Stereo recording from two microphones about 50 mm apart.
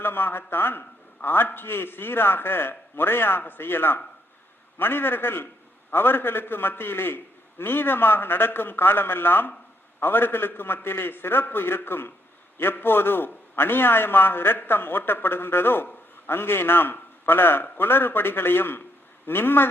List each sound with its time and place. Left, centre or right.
0.0 s a man's voice: left